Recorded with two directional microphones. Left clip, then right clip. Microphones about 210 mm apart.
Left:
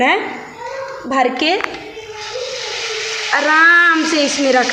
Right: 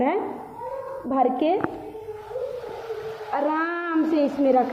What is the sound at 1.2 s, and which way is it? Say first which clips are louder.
Speech: left 6 dB; 5° left (ahead or behind).